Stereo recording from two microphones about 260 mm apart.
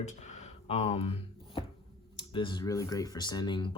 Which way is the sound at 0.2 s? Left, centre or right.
Left.